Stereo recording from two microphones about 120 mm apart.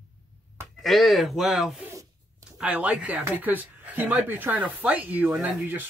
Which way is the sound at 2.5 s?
10° right (ahead or behind).